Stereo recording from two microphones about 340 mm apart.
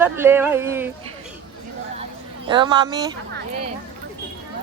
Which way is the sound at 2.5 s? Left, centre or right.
Centre.